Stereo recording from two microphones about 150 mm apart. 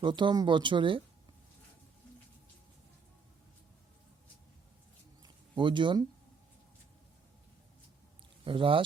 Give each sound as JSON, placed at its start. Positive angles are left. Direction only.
{"t": 0.0, "sound": "speech", "side_deg": -30}
{"t": 5.2, "sound": "a sound", "side_deg": -30}
{"t": 8.4, "sound": "speech", "side_deg": -35}